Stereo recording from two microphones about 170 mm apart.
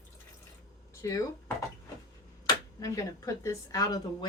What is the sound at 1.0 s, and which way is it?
Speech, 20° left (ahead or behind).